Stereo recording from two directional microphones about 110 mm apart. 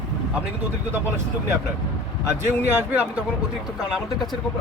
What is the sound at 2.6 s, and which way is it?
Speech, 20° right (ahead or behind).